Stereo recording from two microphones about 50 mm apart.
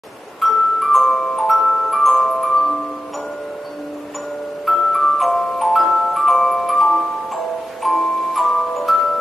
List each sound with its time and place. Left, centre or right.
0.4 s glockenspiel: centre
4.6 s music: centre